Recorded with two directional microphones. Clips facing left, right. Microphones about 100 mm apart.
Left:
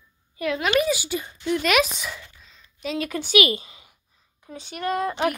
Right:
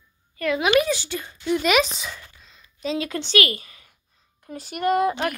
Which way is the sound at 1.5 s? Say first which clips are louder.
Right 1 dB; centre (ahead or behind).